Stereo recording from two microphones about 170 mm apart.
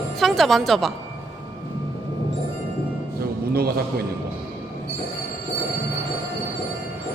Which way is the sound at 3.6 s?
65° right (ahead or behind).